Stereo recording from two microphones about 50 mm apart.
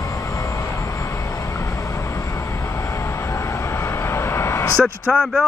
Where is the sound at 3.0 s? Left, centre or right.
Left.